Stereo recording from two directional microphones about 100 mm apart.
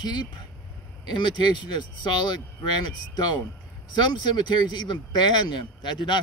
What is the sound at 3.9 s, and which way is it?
Speech, 45° left (ahead or behind).